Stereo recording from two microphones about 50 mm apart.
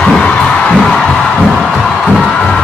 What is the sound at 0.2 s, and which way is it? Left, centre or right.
Heart sounds, centre.